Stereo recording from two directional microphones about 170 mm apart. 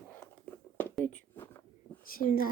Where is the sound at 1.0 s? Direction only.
10° left (ahead or behind).